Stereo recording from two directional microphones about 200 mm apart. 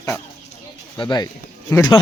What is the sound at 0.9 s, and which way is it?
Speech, 20° left (ahead or behind).